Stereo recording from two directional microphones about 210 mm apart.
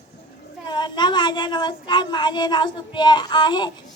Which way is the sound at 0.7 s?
20° left (ahead or behind).